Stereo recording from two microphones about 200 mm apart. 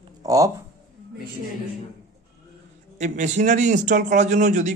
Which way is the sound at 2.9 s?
35° right (ahead or behind).